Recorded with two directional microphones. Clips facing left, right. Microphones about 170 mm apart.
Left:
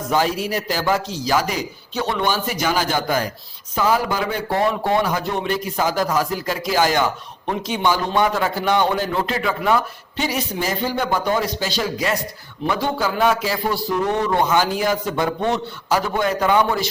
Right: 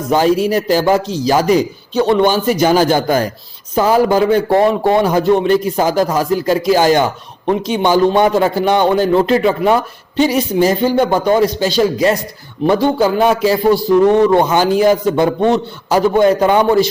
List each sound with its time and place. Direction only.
0.1 s speech: 25° right (ahead or behind)